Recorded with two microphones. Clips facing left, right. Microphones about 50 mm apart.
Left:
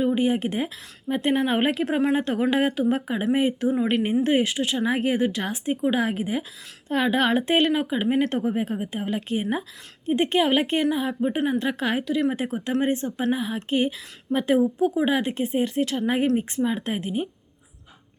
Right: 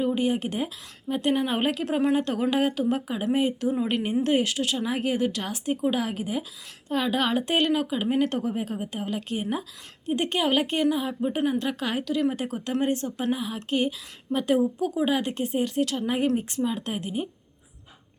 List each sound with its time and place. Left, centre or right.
0.0 s a woman's voice: left